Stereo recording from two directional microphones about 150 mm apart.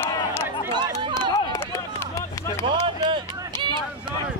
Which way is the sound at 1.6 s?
20° left (ahead or behind).